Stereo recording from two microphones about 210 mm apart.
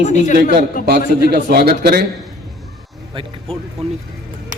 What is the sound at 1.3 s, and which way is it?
Speech, 50° right (ahead or behind).